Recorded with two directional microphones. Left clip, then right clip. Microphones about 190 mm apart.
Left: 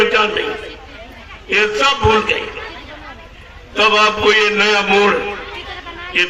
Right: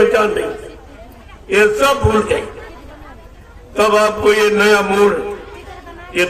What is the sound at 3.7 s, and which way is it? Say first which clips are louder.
A man's voice: even; 90° right.